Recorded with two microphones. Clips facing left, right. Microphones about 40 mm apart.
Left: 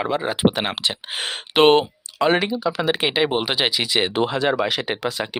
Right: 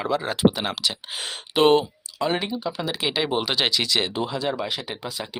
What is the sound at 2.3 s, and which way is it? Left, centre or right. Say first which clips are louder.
Speech: left 7 dB; left.